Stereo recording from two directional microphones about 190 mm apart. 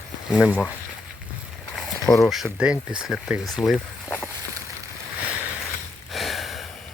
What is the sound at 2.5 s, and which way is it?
Speech, 5° right (ahead or behind).